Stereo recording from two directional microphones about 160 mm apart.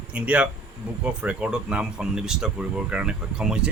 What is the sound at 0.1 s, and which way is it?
Speech, 10° right (ahead or behind).